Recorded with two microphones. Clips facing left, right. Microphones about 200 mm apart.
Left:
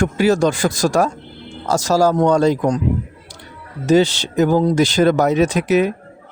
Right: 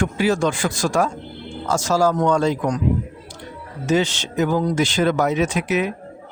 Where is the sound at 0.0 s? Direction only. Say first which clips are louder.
Left 4 dB; 40° left (ahead or behind).